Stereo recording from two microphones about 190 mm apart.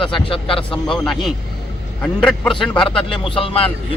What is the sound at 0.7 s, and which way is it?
Speech, centre (ahead or behind).